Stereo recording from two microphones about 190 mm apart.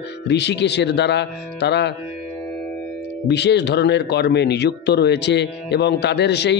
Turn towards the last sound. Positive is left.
turn(degrees=65)  # may be behind; listen again after turning